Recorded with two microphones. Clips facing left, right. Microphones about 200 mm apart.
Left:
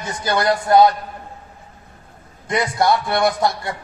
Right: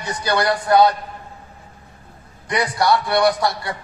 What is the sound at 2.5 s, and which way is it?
Speech, 20° left (ahead or behind).